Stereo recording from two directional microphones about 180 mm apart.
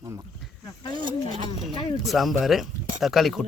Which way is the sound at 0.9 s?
25° right (ahead or behind).